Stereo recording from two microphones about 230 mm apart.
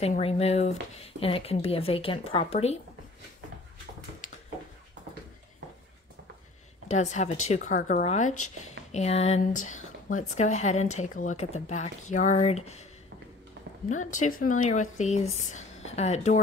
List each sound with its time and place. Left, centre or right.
0.0 s speech: left
6.9 s speech: left
13.8 s speech: left